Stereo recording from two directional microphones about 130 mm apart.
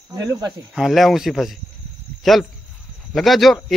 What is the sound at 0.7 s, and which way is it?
Speech, centre (ahead or behind).